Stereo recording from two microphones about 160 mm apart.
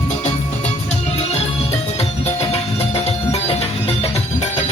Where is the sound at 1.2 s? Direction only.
40° left (ahead or behind).